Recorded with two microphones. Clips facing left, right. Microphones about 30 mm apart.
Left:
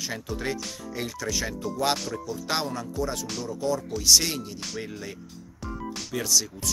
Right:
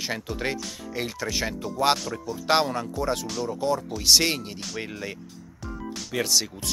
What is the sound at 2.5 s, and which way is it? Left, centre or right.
Speech, right.